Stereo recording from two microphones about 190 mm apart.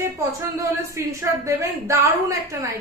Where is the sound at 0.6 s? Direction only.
15° right (ahead or behind).